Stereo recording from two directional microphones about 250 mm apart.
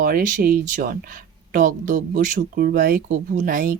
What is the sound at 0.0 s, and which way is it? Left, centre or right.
Speech, right.